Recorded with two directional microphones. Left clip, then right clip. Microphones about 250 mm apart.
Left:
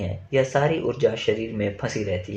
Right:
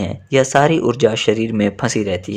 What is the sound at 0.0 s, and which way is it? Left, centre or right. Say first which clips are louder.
Speech: right 7 dB; right.